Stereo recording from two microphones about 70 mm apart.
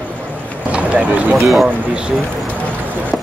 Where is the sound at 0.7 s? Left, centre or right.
Right.